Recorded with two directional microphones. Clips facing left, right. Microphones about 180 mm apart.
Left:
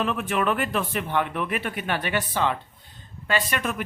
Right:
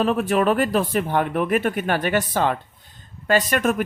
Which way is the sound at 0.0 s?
40° right (ahead or behind).